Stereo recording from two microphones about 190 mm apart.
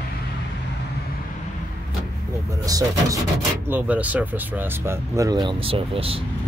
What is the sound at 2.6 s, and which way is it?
Speech, 20° right (ahead or behind).